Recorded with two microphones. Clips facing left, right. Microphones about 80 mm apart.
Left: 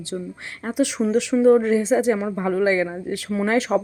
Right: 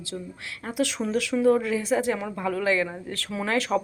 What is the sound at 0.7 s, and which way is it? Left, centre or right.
A woman's voice, centre.